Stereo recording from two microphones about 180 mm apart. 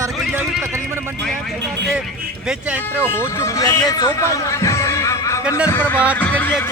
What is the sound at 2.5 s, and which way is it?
Speech, 10° right (ahead or behind).